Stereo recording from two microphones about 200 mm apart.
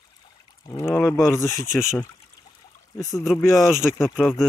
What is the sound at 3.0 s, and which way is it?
Speech, 15° left (ahead or behind).